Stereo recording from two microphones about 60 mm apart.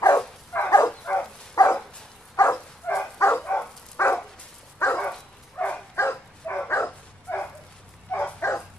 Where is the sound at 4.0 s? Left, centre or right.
Left.